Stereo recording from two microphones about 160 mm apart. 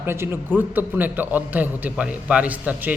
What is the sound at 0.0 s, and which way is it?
A man's voice, 15° right (ahead or behind).